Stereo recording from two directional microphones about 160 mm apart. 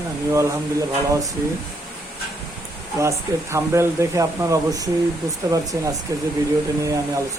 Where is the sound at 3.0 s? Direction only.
20° right (ahead or behind).